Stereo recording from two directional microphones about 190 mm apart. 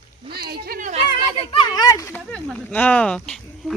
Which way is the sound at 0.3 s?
50° right (ahead or behind).